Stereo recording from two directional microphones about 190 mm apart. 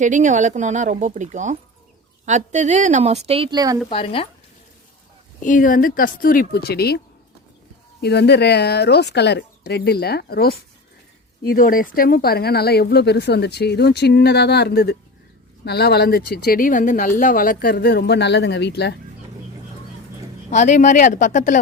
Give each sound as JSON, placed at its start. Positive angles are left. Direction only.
{"t": 0.0, "sound": "speech", "side_deg": -40}
{"t": 3.8, "sound": "speech", "side_deg": 30}
{"t": 5.4, "sound": "speech", "side_deg": 45}
{"t": 8.0, "sound": "speech", "side_deg": 60}
{"t": 20.5, "sound": "speech", "side_deg": 40}